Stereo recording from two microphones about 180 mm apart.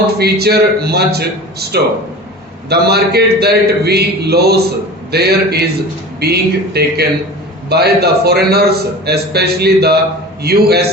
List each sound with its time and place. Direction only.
0.2 s a man's voice: 60° right (ahead or behind)